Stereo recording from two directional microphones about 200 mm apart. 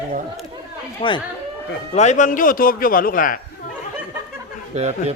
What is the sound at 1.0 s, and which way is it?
A woman's voice, 30° left (ahead or behind).